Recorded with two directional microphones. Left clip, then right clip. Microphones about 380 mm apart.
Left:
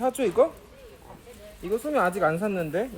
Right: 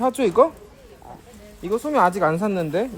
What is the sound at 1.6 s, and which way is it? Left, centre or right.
Speech, right.